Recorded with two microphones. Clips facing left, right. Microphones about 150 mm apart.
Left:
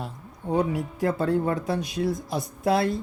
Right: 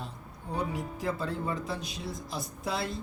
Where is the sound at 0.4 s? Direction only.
65° left (ahead or behind).